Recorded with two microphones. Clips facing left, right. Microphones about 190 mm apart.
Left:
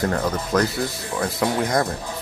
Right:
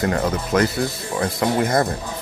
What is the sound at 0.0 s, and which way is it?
Speech, 5° right (ahead or behind).